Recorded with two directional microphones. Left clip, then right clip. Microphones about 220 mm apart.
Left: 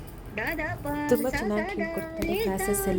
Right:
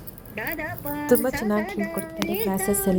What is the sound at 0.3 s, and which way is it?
Speech, centre (ahead or behind).